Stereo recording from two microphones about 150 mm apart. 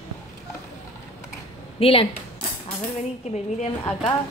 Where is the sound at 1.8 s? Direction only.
40° left (ahead or behind).